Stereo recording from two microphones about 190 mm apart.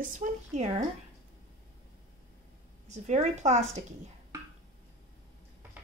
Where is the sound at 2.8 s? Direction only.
40° right (ahead or behind).